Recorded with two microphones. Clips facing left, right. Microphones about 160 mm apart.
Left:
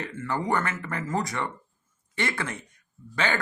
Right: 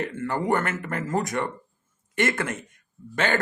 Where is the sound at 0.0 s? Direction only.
50° right (ahead or behind).